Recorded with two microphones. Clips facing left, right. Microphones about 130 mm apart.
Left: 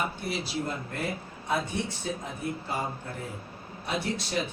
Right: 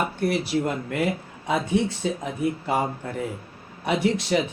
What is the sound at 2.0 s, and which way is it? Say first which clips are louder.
Speech: right 7 dB; 90° right.